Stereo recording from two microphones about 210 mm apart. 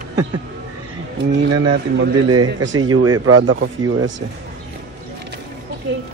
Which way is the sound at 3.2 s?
80° right.